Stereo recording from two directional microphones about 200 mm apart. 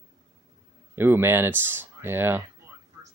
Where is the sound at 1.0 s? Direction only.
10° right (ahead or behind).